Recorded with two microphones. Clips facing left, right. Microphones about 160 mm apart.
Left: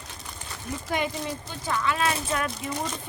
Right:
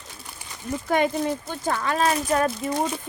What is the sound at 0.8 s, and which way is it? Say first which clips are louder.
Speech: right 7 dB; 50° right (ahead or behind).